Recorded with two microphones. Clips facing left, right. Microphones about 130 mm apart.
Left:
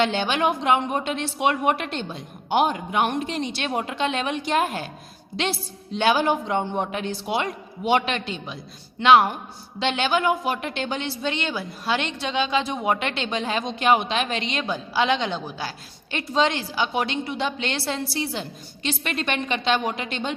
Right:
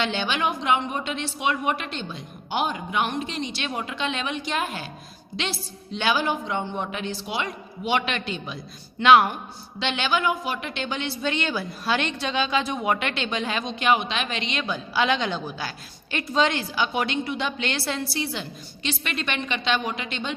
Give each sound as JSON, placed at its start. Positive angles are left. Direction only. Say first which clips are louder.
{"t": 0.0, "sound": "a woman's voice", "louder": "left 4 dB", "side_deg": 45}
{"t": 9.7, "sound": "speech", "louder": "left 3 dB", "side_deg": 40}